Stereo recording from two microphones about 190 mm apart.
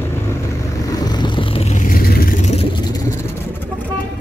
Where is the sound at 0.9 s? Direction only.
20° left (ahead or behind); by 2.6 s 40° left (ahead or behind).